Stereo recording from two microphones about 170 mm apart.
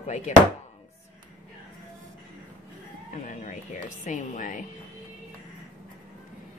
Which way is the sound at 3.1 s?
45° left (ahead or behind).